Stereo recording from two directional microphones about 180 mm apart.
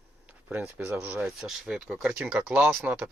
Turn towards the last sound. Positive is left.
turn(degrees=-5)  # may be behind; listen again after turning